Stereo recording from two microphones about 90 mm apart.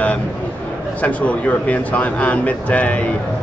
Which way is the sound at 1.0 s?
15° left (ahead or behind).